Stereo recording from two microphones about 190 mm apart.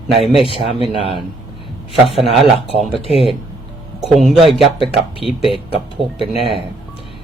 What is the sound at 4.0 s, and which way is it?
Speech, centre (ahead or behind).